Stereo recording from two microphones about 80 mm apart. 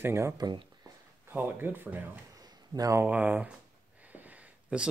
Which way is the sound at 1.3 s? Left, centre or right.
Right.